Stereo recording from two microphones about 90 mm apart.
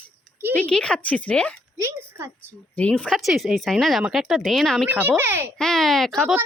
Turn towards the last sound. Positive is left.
turn(degrees=5)  # may be behind; listen again after turning